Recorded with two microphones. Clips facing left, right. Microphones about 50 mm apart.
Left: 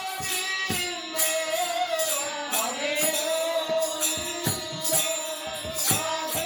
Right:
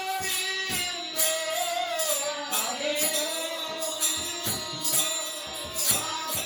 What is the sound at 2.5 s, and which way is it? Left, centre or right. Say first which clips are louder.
Music: left 3 dB; left.